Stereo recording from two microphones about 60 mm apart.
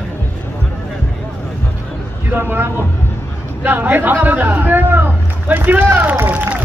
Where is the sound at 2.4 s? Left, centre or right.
Right.